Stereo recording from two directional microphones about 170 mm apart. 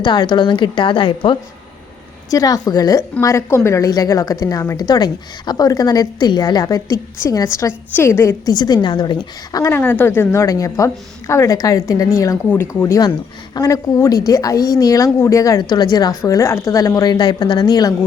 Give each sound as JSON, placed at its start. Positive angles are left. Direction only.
{"t": 0.0, "sound": "a woman's voice", "side_deg": 25}